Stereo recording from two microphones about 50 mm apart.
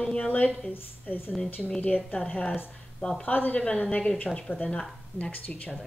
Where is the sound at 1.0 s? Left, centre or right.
Left.